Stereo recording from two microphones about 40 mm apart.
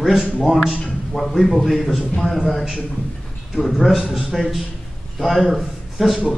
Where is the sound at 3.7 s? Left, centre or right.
Centre.